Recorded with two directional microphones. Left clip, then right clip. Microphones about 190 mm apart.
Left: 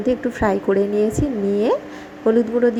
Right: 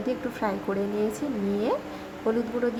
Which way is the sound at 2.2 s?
25° left (ahead or behind).